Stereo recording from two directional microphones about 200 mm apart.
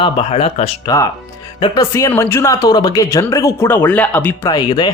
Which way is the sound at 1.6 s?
20° left (ahead or behind).